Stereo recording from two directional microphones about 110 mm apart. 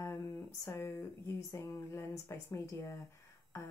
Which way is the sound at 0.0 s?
25° left (ahead or behind).